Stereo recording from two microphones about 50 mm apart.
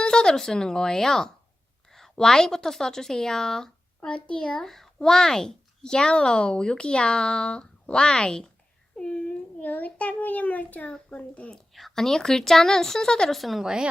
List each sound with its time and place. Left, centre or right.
0.0 s a woman's voice: centre
9.0 s a sound: centre
9.6 s a child's voice: left
11.5 s speech: centre
13.3 s speech: centre